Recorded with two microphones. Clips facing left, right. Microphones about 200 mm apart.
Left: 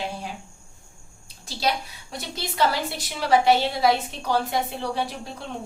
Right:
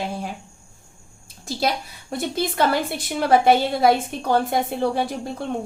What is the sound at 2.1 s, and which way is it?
A woman's voice, 50° right (ahead or behind).